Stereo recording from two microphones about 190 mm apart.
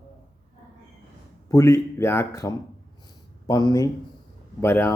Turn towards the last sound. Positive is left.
turn(degrees=15)  # may be behind; listen again after turning